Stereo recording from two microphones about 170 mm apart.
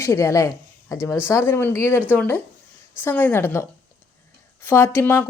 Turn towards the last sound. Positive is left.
turn(degrees=15)  # may be behind; listen again after turning